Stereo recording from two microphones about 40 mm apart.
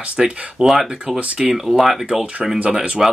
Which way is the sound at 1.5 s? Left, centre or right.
Centre.